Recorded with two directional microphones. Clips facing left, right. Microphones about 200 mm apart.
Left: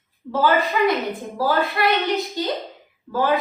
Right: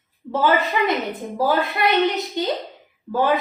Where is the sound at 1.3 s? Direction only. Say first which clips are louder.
Right 1 dB; 20° right (ahead or behind).